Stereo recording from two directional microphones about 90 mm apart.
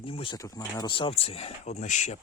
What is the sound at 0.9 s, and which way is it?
Speech, 85° left.